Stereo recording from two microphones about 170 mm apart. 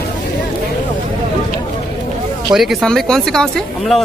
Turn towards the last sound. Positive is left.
turn(degrees=0)  # may be behind; listen again after turning